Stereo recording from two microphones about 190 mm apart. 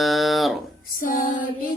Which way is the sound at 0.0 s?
Centre (ahead or behind).